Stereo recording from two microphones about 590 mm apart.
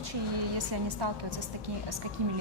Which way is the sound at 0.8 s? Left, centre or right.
Right.